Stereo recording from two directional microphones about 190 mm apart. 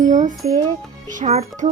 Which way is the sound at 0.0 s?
40° right (ahead or behind).